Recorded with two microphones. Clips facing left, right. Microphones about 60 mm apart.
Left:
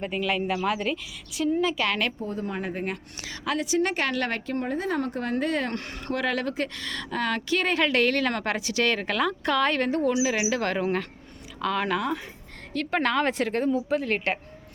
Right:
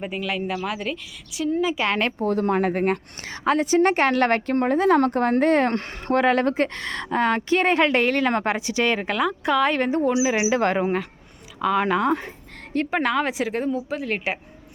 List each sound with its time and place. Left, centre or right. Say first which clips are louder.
0.0 s a woman's voice: even; centre
1.7 s speech: right 3 dB; right
2.1 s speech: right 10 dB; right
3.4 s a woman's voice: right 7 dB; right; by 12.0 s centre
12.0 s a woman's voice: right 7 dB; right
12.9 s a woman's voice: even; centre